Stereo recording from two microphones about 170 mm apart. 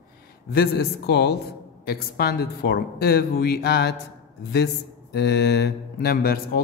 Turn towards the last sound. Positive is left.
turn(degrees=65)  # may be behind; listen again after turning